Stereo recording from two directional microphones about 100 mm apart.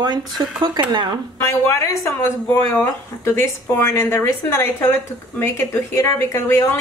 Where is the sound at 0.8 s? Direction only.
50° right (ahead or behind).